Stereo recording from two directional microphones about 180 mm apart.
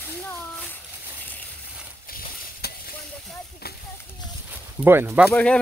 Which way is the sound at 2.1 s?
55° left (ahead or behind).